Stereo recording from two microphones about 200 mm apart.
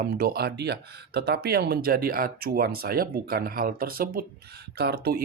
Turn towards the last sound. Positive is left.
turn(degrees=-50)  # may be behind; listen again after turning